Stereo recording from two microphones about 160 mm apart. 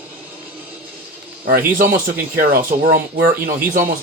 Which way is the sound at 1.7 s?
60° right (ahead or behind).